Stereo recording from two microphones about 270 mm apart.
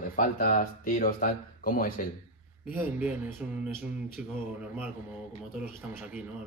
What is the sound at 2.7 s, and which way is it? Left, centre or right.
Speech, centre.